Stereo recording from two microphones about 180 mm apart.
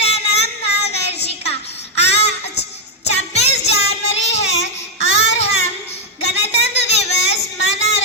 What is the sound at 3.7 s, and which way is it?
Child singing, 35° left (ahead or behind).